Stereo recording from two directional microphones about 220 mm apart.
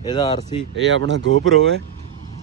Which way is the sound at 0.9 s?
60° right (ahead or behind).